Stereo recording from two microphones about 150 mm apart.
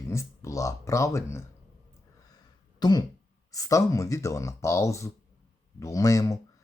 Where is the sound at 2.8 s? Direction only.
25° left (ahead or behind).